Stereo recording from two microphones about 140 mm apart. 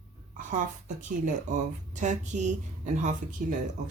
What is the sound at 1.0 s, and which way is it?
Speech, 60° right (ahead or behind).